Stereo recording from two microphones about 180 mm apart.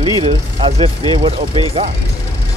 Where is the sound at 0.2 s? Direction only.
35° right (ahead or behind).